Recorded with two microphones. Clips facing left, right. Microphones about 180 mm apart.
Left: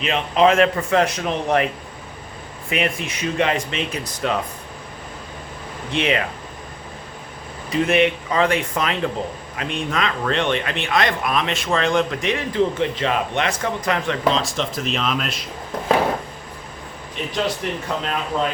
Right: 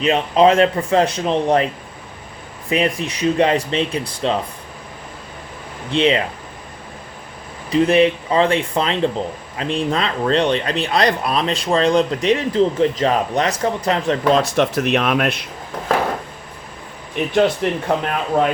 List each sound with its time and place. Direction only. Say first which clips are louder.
0.0 s speech: right 3 dB; 35° right (ahead or behind)
5.9 s speech: right 5 dB; 30° right (ahead or behind)
7.7 s speech: right 4 dB; 35° right (ahead or behind)
14.3 s speech: right 7 dB; 65° right (ahead or behind)
17.8 s speech: right 5 dB; 55° right (ahead or behind)